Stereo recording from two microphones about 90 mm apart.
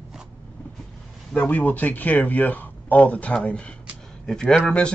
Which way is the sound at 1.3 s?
15° left (ahead or behind).